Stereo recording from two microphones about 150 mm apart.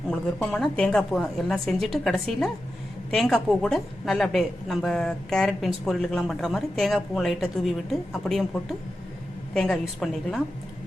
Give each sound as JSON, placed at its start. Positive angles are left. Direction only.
{"t": 0.1, "sound": "a woman's voice", "side_deg": 5}
{"t": 9.6, "sound": "a woman's voice", "side_deg": 5}